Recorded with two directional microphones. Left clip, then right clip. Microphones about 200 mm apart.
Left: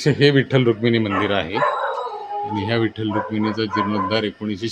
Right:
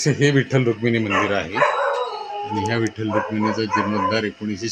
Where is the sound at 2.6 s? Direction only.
5° left (ahead or behind).